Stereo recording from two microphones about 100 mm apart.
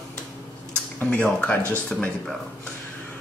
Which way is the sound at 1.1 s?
15° left (ahead or behind).